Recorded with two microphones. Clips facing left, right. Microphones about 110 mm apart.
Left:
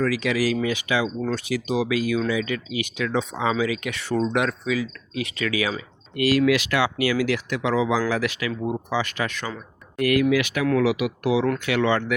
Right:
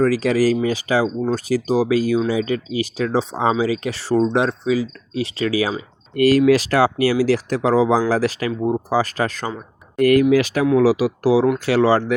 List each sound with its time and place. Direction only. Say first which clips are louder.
0.0 s speech: right 6 dB; 40° right (ahead or behind)